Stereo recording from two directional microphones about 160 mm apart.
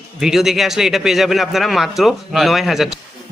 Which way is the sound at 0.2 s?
Centre (ahead or behind).